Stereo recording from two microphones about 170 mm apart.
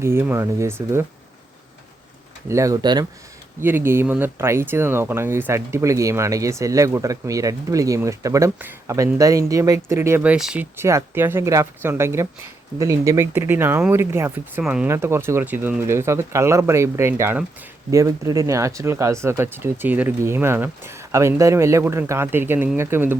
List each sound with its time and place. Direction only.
0.0 s speech: 15° right (ahead or behind)
2.5 s speech: 20° right (ahead or behind)
3.6 s speech: 10° right (ahead or behind)